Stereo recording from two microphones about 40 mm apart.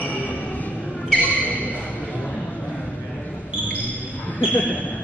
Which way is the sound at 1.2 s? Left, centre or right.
Left.